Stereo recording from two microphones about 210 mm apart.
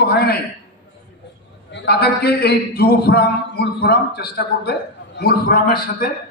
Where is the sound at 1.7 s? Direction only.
55° left (ahead or behind).